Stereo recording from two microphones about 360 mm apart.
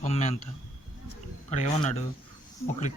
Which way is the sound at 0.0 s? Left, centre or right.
Centre.